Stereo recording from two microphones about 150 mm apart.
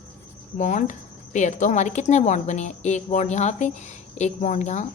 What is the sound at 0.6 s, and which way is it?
Speech, 55° left (ahead or behind).